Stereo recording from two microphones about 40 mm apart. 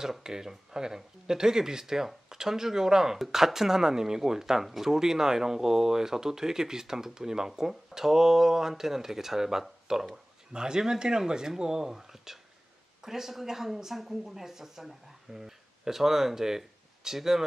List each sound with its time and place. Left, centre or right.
0.2 s speech: centre